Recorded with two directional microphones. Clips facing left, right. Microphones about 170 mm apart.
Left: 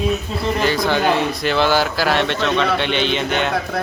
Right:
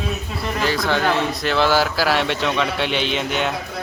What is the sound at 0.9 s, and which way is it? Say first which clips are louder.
Speech: left 2 dB; centre (ahead or behind).